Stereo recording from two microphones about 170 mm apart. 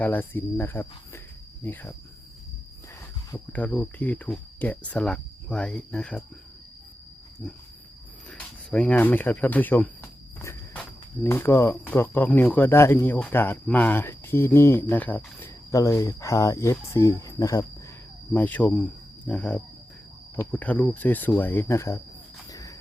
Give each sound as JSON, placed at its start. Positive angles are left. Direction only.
{"t": 0.0, "sound": "speech", "side_deg": 10}
{"t": 3.3, "sound": "speech", "side_deg": 10}
{"t": 7.4, "sound": "wild animals", "side_deg": 5}
{"t": 8.3, "sound": "speech", "side_deg": 5}
{"t": 18.3, "sound": "speech", "side_deg": 10}
{"t": 22.4, "sound": "cricket", "side_deg": 20}